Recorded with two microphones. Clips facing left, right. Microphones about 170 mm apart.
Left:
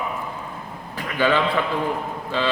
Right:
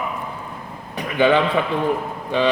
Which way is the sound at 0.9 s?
20° right (ahead or behind).